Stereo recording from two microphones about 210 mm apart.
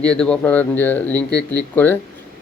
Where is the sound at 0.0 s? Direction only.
5° left (ahead or behind).